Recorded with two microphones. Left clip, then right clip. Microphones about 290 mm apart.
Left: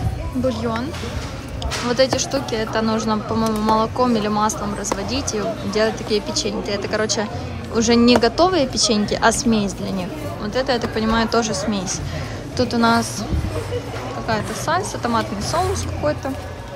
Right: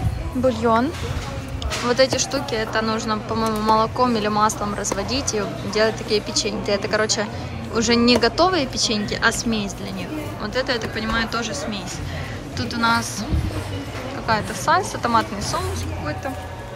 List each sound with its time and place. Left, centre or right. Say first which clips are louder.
0.5 s speech: right 6 dB; centre
1.9 s a woman's voice: even; centre
14.2 s a woman's voice: right 2 dB; centre